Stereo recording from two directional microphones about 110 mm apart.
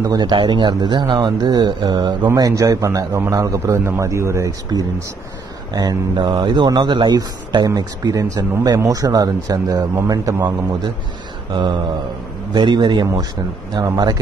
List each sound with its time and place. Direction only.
0.0 s a man's voice: 40° right (ahead or behind)
12.5 s a man's voice: 45° right (ahead or behind)